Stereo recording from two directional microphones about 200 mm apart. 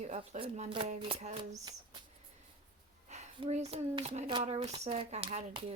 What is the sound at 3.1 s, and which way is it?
Speech, 35° right (ahead or behind).